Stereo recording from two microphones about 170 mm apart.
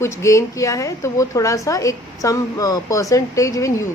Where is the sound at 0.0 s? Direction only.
15° left (ahead or behind).